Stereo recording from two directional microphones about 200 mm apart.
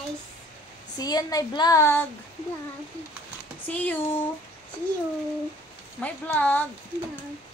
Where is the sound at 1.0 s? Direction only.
20° left (ahead or behind).